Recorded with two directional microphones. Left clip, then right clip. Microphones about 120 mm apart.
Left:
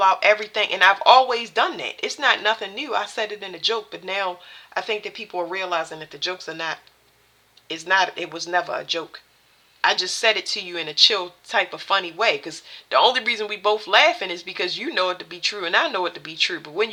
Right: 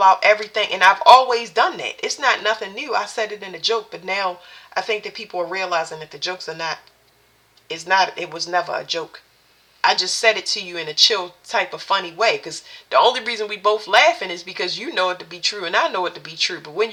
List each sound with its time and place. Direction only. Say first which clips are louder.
0.0 s speech: right 3 dB; 30° left (ahead or behind)